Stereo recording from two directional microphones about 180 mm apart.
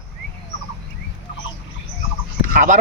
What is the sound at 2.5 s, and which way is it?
Speech, 45° right (ahead or behind).